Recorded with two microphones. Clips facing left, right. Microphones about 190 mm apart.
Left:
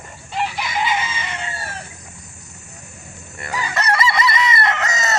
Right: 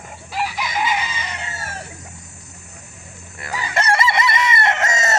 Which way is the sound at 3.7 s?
25° right (ahead or behind).